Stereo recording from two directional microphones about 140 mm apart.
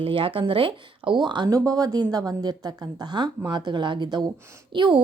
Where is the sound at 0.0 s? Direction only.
40° right (ahead or behind).